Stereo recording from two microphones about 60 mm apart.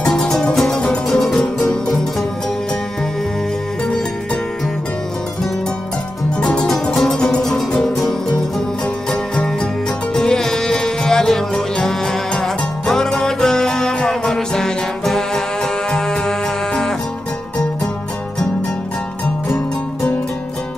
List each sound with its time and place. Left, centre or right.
0.0 s music: centre
6.4 s music: centre
6.7 s music: centre